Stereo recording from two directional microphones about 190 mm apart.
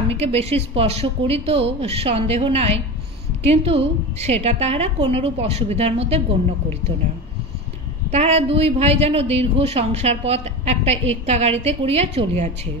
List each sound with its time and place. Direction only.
0.1 s speech: 35° right (ahead or behind)
8.1 s speech: 35° right (ahead or behind)